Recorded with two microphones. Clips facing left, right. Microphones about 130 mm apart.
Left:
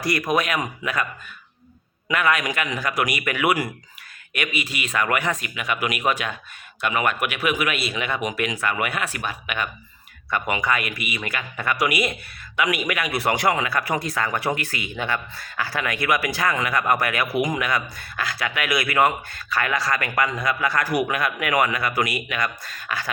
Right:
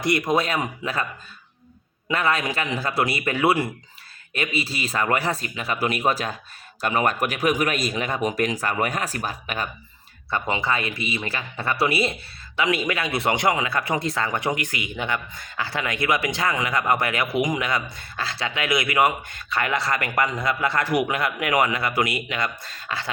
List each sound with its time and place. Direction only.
0.0 s speech: 20° right (ahead or behind)
2.0 s speech: 30° right (ahead or behind)